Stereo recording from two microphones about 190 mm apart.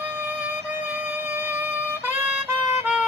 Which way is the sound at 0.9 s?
10° right (ahead or behind).